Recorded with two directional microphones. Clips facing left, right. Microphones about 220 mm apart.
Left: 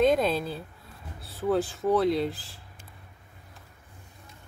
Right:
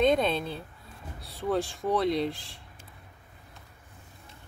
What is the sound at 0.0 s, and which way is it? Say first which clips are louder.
Speech: left 1 dB; 5° left (ahead or behind).